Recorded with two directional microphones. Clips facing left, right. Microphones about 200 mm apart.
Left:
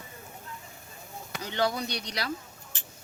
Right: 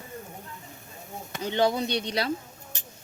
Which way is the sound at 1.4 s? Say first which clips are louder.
Right 5 dB; 25° right (ahead or behind).